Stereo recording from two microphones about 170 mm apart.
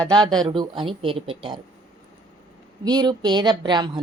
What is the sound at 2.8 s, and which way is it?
A woman's voice, 25° right (ahead or behind).